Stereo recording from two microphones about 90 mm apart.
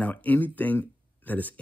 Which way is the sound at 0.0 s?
15° left (ahead or behind).